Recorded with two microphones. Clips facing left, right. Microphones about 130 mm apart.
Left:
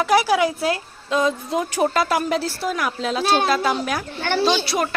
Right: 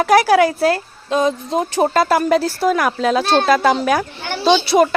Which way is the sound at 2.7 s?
80° right.